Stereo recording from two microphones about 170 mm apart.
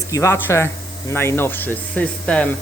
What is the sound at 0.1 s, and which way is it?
Speech, 15° left (ahead or behind).